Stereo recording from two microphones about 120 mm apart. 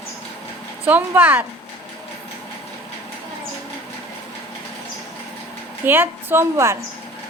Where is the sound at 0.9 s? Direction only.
15° right (ahead or behind).